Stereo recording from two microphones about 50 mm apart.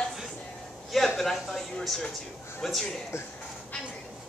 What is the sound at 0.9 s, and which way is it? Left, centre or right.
Speech, centre.